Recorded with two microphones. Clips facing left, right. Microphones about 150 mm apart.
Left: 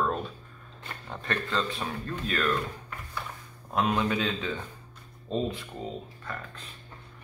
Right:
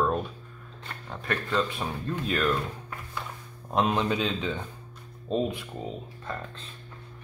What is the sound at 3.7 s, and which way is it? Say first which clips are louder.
Speech: right 1 dB; 20° right (ahead or behind).